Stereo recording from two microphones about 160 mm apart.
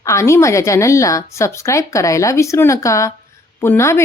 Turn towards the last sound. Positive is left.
turn(degrees=15)  # may be behind; listen again after turning